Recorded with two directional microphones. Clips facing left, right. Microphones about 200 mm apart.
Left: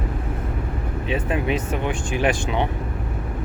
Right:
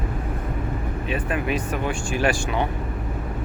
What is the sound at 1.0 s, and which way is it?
Speech, 25° left (ahead or behind).